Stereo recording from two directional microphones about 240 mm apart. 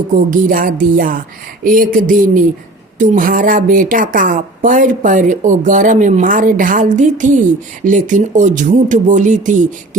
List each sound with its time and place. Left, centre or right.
0.1 s speech: right